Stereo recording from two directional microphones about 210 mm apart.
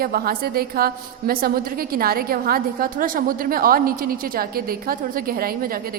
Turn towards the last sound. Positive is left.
turn(degrees=-45)  # may be behind; listen again after turning